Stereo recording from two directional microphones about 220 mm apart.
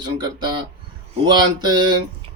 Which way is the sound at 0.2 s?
20° right (ahead or behind).